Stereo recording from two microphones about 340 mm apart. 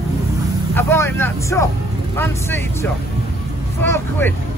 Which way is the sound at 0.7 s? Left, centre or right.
Centre.